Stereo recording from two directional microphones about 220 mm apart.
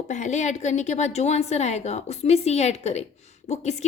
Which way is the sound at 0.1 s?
30° left (ahead or behind).